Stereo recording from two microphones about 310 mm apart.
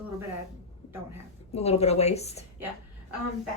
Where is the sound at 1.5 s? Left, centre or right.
Centre.